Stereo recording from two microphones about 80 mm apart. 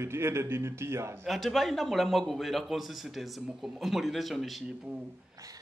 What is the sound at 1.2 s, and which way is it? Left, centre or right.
A man's voice, centre.